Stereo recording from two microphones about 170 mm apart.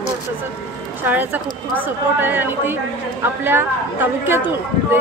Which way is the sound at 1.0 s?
10° right (ahead or behind).